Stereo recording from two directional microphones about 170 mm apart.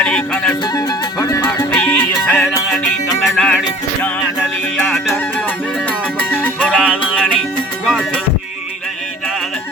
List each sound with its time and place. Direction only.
0.0 s music: 5° left (ahead or behind)
0.6 s music: 25° left (ahead or behind)
1.7 s music: 10° left (ahead or behind)
6.1 s music: 10° left (ahead or behind)